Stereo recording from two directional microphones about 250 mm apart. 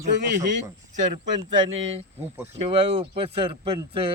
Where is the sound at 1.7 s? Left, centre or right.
Right.